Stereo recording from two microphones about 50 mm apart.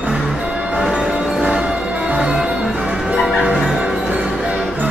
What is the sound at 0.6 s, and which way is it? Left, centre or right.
Music, right.